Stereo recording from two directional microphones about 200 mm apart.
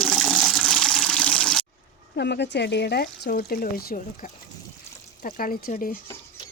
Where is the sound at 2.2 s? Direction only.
60° left (ahead or behind).